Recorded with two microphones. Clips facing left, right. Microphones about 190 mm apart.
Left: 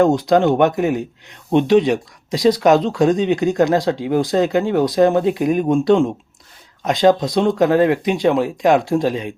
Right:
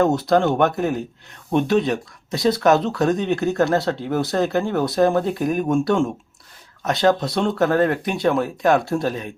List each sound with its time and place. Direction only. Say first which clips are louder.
0.0 s speech: left 3 dB; 15° left (ahead or behind)